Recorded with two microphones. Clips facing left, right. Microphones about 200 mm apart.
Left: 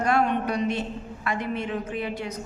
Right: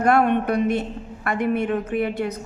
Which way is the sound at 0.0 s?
55° right (ahead or behind).